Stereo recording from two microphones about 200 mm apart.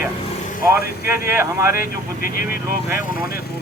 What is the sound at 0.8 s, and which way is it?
Speech, 50° left (ahead or behind).